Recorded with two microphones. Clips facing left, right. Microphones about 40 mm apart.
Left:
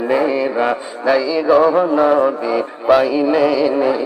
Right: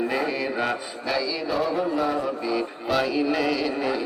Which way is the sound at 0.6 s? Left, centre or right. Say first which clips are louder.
Left 9 dB; left.